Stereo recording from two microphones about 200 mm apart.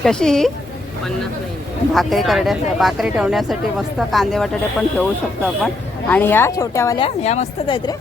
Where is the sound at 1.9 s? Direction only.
Centre (ahead or behind); by 7.0 s 15° left (ahead or behind).